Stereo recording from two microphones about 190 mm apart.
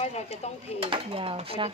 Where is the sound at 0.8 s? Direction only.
30° right (ahead or behind).